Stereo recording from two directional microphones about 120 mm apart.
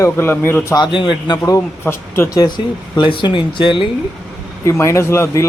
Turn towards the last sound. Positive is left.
turn(degrees=20)  # may be behind; listen again after turning